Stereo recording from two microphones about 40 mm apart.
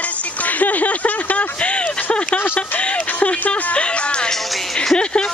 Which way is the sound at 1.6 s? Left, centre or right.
Left.